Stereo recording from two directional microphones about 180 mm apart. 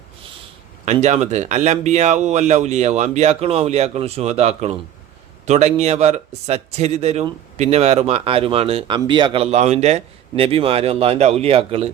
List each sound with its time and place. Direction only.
0.9 s speech: 35° right (ahead or behind)